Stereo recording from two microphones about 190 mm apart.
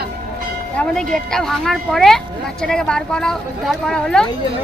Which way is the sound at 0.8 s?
5° left (ahead or behind).